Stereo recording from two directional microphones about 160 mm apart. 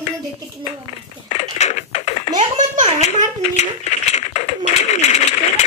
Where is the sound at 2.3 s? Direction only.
50° right (ahead or behind).